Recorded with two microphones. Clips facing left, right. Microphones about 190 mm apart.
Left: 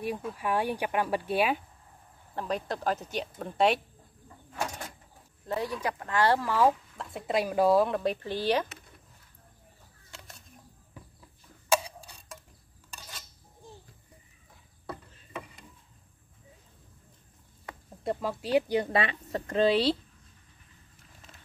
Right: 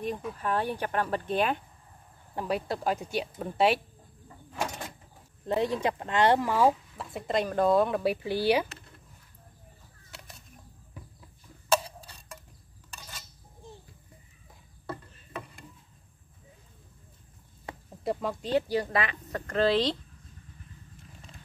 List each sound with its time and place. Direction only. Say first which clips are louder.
0.3 s speech: left 1 dB; 10° left (ahead or behind)
2.3 s speech: right 2 dB; 10° right (ahead or behind)
4.6 s a sound: right 1 dB; 5° right (ahead or behind)
5.5 s speech: right 4 dB; 25° right (ahead or behind)
7.1 s speech: even; centre (ahead or behind)
10.1 s a sound: even; centre (ahead or behind)
11.7 s clock: even; 10° left (ahead or behind)
14.9 s a sound: right 2 dB; centre (ahead or behind)
18.0 s speech: right 1 dB; 5° left (ahead or behind)
18.8 s speech: left 1 dB; 30° left (ahead or behind); by 20.0 s 10° left (ahead or behind)